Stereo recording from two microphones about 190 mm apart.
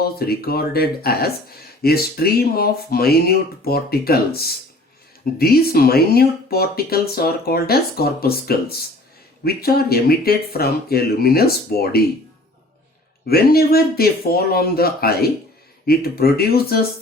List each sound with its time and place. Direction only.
0.0 s speech: 55° left (ahead or behind)
13.2 s speech: 55° left (ahead or behind)